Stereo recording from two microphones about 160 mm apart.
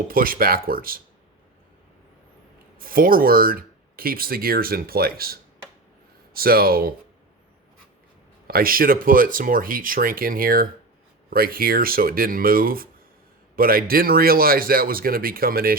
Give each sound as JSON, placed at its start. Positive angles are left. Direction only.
{"t": 0.1, "sound": "speech", "side_deg": -65}
{"t": 2.7, "sound": "speech", "side_deg": -65}
{"t": 8.4, "sound": "speech", "side_deg": -65}